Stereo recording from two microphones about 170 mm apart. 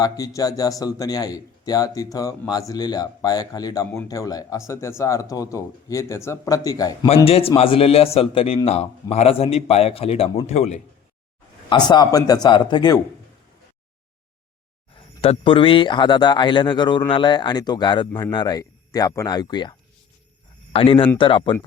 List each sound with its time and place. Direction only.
0.0 s speech: 20° left (ahead or behind)
7.3 s a man's voice: 35° left (ahead or behind)
11.7 s speech: 25° left (ahead or behind)
14.9 s speech: 30° left (ahead or behind)
20.7 s a man's voice: 30° left (ahead or behind)